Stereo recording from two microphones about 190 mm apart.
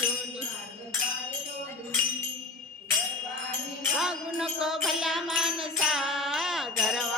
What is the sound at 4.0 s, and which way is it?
Music, 5° right (ahead or behind).